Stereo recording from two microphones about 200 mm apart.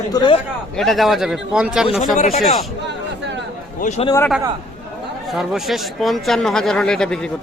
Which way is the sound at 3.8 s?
35° left (ahead or behind).